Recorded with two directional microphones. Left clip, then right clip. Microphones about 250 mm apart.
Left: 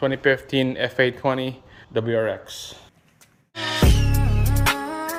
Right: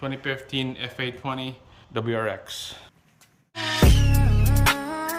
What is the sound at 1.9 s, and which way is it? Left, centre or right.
Speech, centre.